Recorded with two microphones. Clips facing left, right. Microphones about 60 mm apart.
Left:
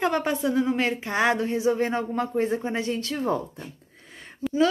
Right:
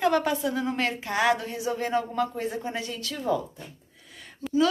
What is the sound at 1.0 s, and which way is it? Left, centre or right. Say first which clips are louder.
Speech: right 1 dB; left.